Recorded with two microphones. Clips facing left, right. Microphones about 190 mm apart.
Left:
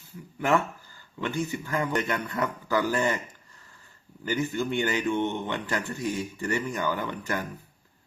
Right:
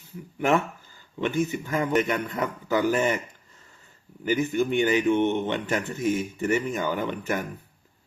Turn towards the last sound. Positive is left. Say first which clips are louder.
# right 3 dB
turn(degrees=-20)  # may be behind; listen again after turning